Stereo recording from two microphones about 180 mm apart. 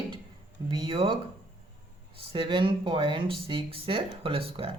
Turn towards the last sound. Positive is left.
turn(degrees=-30)  # may be behind; listen again after turning